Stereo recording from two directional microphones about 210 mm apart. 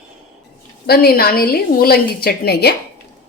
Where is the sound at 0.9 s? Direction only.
45° left (ahead or behind).